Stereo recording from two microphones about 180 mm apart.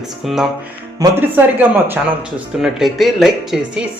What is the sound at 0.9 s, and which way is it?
Speech, 15° right (ahead or behind).